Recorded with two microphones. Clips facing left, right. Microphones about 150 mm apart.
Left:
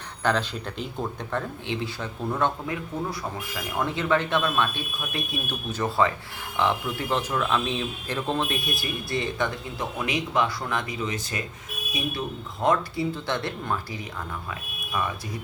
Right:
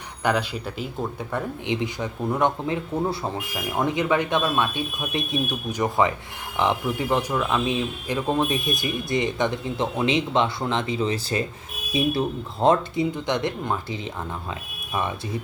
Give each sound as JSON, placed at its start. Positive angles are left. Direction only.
{"t": 0.2, "sound": "speech", "side_deg": -10}
{"t": 13.1, "sound": "speech", "side_deg": -20}